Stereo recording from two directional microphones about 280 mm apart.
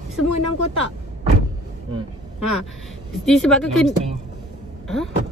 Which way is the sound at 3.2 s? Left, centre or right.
Centre.